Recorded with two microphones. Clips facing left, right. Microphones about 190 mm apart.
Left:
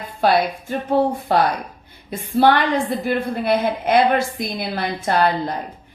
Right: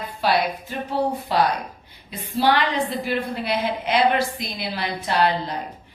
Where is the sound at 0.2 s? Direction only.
50° left (ahead or behind).